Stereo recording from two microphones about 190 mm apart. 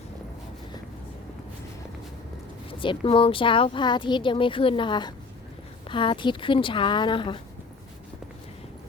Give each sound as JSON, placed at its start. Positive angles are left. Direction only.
{"t": 2.6, "sound": "speech", "side_deg": 25}